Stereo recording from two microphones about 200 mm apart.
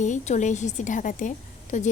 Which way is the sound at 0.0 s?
35° left (ahead or behind).